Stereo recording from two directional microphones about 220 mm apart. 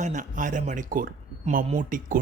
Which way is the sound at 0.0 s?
35° right (ahead or behind).